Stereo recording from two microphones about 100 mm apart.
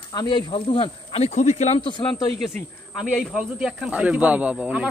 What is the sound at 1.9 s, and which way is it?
Speech, 55° left (ahead or behind).